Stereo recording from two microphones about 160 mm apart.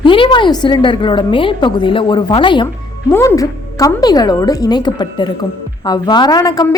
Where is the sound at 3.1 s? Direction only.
20° left (ahead or behind).